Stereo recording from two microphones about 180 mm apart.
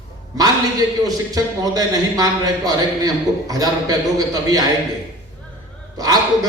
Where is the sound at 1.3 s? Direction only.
20° right (ahead or behind).